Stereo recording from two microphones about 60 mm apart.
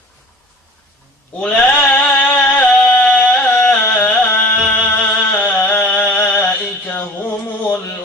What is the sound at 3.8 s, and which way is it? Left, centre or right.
Music, left.